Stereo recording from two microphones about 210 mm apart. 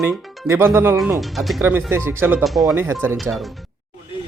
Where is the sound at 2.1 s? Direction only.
10° right (ahead or behind).